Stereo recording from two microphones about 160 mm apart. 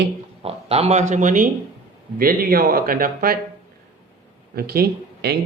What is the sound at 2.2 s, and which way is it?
Speech, 65° right (ahead or behind).